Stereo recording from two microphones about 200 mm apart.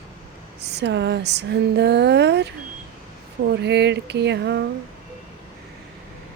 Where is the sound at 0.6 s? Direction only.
55° right (ahead or behind).